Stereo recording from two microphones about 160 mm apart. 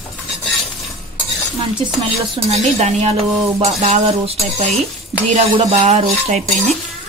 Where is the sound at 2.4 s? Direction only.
40° right (ahead or behind).